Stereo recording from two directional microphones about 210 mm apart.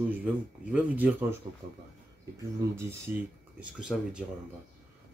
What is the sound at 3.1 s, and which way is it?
Speech, 5° right (ahead or behind).